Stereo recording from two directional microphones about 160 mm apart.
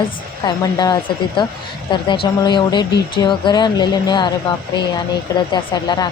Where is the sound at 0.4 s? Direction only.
25° left (ahead or behind).